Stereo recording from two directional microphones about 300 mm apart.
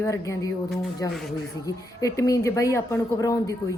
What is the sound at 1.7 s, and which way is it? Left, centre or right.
Speech, centre.